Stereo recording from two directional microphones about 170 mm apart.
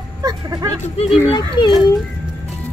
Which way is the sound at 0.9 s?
35° left (ahead or behind).